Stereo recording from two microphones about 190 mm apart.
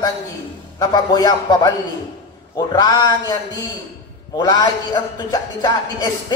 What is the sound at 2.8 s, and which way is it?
A man's voice, 20° left (ahead or behind).